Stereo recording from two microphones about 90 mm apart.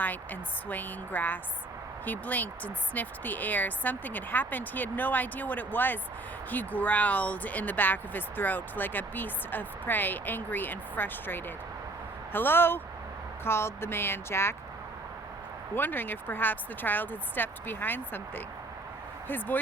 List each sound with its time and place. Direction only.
0.0 s speech: 20° left (ahead or behind)
15.7 s speech: 20° left (ahead or behind)